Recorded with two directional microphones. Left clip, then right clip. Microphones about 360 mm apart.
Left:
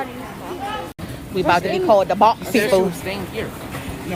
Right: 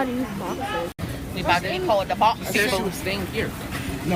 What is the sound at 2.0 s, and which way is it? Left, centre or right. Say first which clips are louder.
Speech: left 5 dB; left.